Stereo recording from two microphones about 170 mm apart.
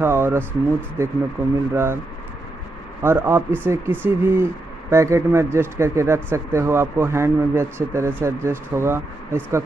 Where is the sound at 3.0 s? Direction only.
15° right (ahead or behind).